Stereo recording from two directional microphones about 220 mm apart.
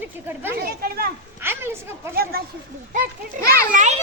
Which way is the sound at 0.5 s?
45° right (ahead or behind).